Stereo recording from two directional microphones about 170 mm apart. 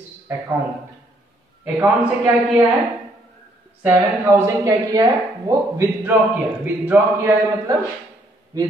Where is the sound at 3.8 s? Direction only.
15° right (ahead or behind).